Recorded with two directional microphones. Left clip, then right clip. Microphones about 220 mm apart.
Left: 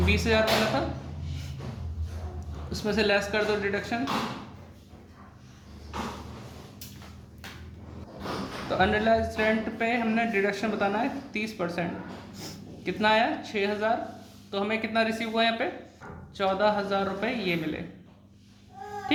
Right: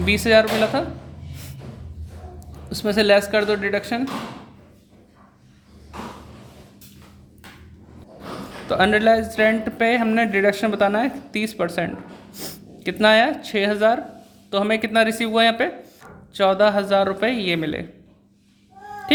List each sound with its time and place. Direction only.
0.0 s speech: 50° right (ahead or behind)
2.6 s speech: 50° right (ahead or behind)
8.7 s speech: 50° right (ahead or behind)